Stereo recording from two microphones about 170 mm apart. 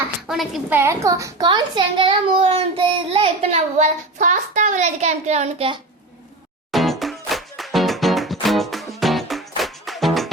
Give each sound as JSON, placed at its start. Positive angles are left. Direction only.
{"t": 0.3, "sound": "a woman's voice", "side_deg": 0}
{"t": 0.7, "sound": "a child's voice", "side_deg": -15}
{"t": 6.7, "sound": "music", "side_deg": 0}